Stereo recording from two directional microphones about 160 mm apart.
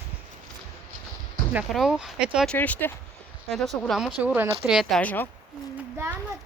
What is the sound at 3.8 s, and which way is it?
Speech, centre (ahead or behind).